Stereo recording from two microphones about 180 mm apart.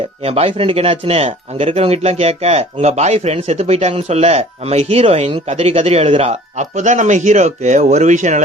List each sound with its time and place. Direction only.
0.2 s speech: 35° right (ahead or behind)